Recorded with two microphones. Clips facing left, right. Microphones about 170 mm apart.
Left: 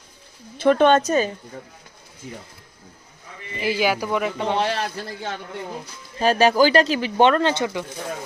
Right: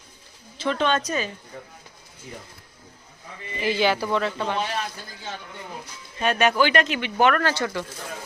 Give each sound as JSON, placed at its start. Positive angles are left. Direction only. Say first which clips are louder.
{"t": 0.5, "sound": "a woman's voice", "louder": "left 8 dB", "side_deg": 55}
{"t": 3.6, "sound": "speech", "louder": "left 1 dB", "side_deg": 10}
{"t": 4.6, "sound": "a man's voice", "louder": "left 5 dB", "side_deg": 75}
{"t": 6.1, "sound": "speech", "louder": "left 4 dB", "side_deg": 30}